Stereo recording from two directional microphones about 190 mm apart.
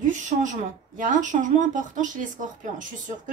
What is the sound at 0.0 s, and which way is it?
A woman's voice, 40° right (ahead or behind).